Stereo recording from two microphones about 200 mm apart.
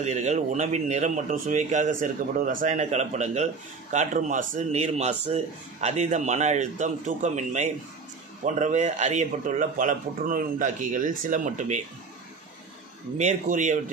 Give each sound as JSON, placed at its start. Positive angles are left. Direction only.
{"t": 0.0, "sound": "speech", "side_deg": -35}
{"t": 13.2, "sound": "speech", "side_deg": -35}